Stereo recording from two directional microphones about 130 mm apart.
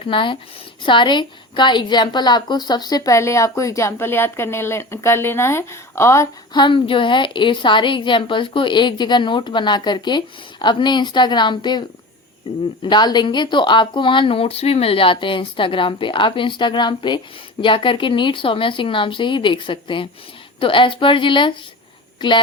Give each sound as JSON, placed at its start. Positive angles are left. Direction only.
{"t": 0.1, "sound": "a woman's voice", "side_deg": 40}
{"t": 6.5, "sound": "a woman's voice", "side_deg": 40}
{"t": 12.8, "sound": "a woman's voice", "side_deg": 35}